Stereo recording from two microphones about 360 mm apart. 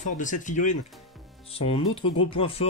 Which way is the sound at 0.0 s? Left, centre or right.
Left.